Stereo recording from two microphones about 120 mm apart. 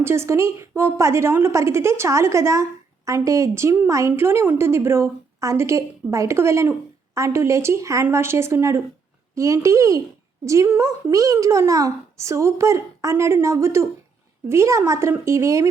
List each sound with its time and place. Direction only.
0.0 s a woman's voice: 20° right (ahead or behind)